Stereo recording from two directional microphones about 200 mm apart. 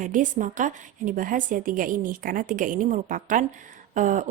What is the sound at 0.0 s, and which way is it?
Speech, 40° right (ahead or behind).